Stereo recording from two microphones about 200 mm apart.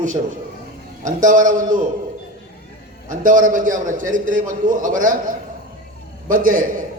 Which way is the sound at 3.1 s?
40° right (ahead or behind).